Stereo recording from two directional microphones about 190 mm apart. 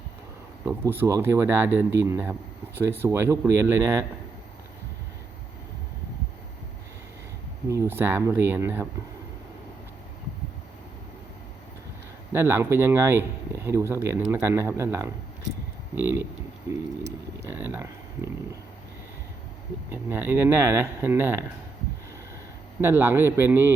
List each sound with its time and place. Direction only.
0.6 s speech: 10° right (ahead or behind)
7.7 s speech: 15° right (ahead or behind)
12.3 s speech: 10° right (ahead or behind)
17.0 s speech: 60° right (ahead or behind)
17.5 s speech: 10° right (ahead or behind)
19.9 s speech: 10° right (ahead or behind)
22.8 s speech: 10° right (ahead or behind)